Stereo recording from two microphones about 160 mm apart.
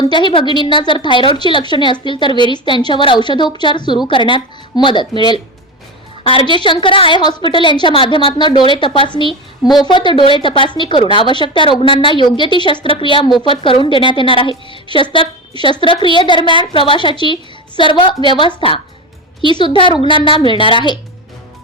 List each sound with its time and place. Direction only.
0.0 s a woman's voice: 30° left (ahead or behind)